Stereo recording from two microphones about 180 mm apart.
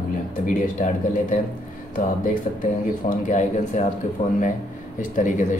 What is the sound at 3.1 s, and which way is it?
Speech, 45° left (ahead or behind).